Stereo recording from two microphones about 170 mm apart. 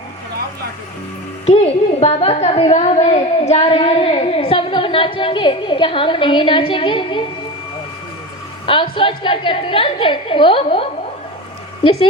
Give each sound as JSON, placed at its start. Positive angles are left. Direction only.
{"t": 1.5, "sound": "a woman's voice", "side_deg": 35}
{"t": 8.6, "sound": "a woman's voice", "side_deg": 30}